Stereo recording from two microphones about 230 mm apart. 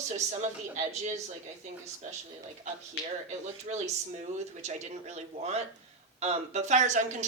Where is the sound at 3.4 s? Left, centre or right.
Right.